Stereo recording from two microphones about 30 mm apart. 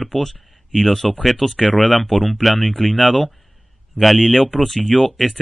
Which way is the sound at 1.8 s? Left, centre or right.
Centre.